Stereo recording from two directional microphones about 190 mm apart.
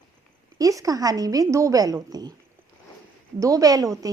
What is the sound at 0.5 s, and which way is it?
Speech, 20° right (ahead or behind).